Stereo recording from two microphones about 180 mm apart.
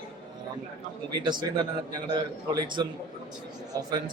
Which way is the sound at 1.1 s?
25° right (ahead or behind).